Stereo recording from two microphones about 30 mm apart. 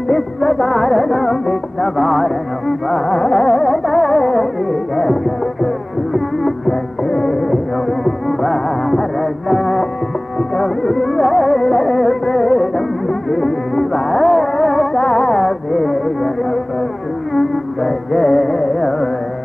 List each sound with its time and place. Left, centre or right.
0.1 s music: centre
7.1 s music: centre
8.0 s music: centre
17.3 s music: centre